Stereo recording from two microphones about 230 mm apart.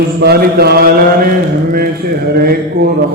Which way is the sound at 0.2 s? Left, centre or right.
Right.